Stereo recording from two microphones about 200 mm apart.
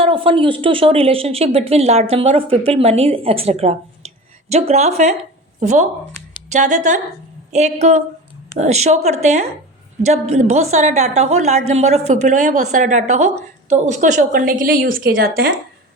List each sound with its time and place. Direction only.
0.0 s a woman's voice: 25° right (ahead or behind); by 15.4 s 45° right (ahead or behind)